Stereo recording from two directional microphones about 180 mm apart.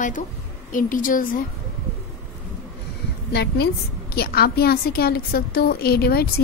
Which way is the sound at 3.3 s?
65° left (ahead or behind).